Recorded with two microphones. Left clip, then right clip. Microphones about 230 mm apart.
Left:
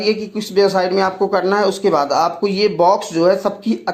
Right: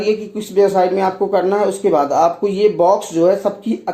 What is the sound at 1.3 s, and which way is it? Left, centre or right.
Speech, left.